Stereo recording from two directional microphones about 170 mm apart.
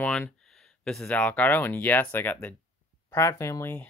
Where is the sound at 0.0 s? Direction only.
5° left (ahead or behind).